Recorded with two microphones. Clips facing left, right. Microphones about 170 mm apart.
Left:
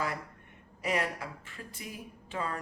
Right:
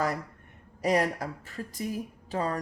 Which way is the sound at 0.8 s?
40° right (ahead or behind).